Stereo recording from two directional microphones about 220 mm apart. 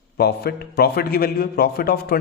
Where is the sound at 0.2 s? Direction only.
45° left (ahead or behind).